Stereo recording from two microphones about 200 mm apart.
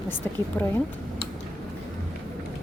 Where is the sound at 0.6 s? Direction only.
10° left (ahead or behind).